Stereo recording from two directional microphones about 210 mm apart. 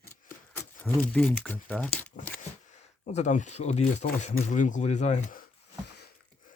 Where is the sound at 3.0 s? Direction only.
35° left (ahead or behind).